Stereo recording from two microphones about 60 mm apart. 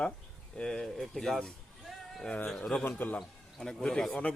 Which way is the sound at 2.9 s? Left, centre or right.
Left.